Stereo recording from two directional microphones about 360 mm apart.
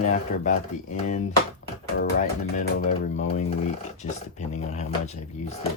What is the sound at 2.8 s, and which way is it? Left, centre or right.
Speech, centre.